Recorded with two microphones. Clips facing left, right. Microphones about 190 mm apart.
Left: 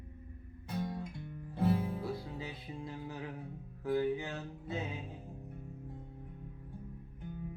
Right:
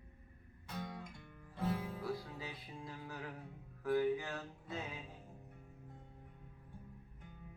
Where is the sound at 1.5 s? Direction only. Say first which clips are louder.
Left 7 dB; 30° left (ahead or behind).